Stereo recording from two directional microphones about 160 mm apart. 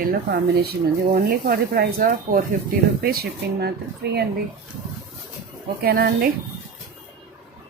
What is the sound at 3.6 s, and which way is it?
Speech, 90° right.